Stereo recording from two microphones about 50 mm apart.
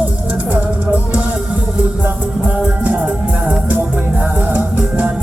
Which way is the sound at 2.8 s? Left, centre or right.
Right.